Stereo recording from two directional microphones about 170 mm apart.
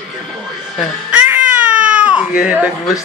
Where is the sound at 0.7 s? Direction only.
10° right (ahead or behind).